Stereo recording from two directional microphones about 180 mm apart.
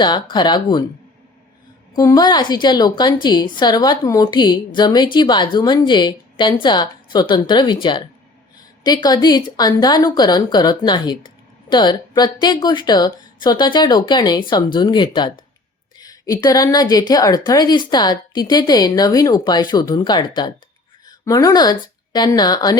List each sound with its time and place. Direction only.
0.0 s a woman's voice: 25° left (ahead or behind)
2.0 s a woman's voice: 20° left (ahead or behind)